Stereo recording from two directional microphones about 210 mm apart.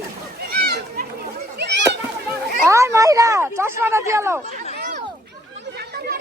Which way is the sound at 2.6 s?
15° right (ahead or behind).